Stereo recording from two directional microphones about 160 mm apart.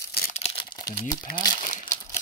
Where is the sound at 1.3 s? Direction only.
30° left (ahead or behind).